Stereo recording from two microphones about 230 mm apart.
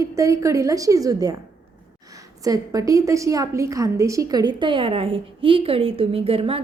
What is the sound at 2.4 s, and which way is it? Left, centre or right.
A woman's voice, centre.